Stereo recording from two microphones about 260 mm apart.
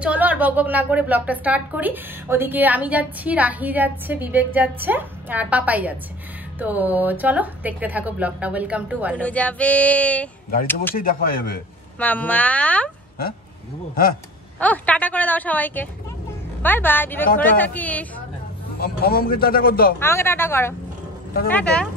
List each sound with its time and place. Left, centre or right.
0.0 s a woman's voice: centre
9.2 s speech: centre
11.0 s a man's voice: left
12.0 s speech: centre
14.6 s speech: centre
18.8 s a man's voice: left
20.0 s speech: centre